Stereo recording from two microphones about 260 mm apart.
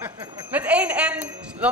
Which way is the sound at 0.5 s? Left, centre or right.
Centre.